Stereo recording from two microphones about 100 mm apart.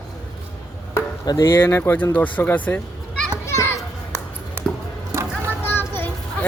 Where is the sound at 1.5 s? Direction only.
25° left (ahead or behind).